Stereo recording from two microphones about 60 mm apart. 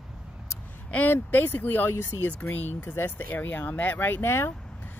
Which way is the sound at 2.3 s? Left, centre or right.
Left.